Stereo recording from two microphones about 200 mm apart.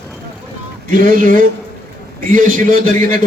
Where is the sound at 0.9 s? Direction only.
45° right (ahead or behind).